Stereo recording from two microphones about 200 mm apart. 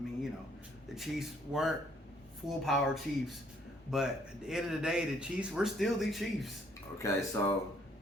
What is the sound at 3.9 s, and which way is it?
Speech, 5° right (ahead or behind).